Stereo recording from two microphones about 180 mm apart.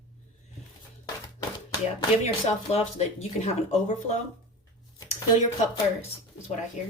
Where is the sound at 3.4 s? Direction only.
40° left (ahead or behind).